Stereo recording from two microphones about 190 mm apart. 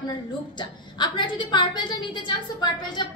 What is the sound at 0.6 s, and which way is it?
A woman's voice, 25° left (ahead or behind).